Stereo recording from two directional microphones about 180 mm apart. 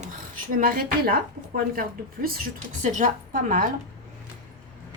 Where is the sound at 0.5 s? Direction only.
55° right (ahead or behind).